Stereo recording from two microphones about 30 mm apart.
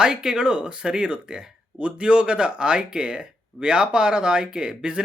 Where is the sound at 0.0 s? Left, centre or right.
Right.